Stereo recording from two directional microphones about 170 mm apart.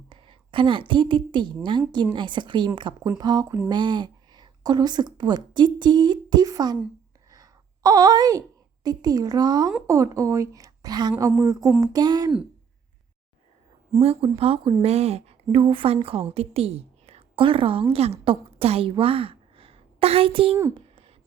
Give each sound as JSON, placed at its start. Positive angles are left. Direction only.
{"t": 0.1, "sound": "a woman's voice", "side_deg": -30}
{"t": 14.0, "sound": "a woman's voice", "side_deg": -35}
{"t": 20.7, "sound": "a sound", "side_deg": -35}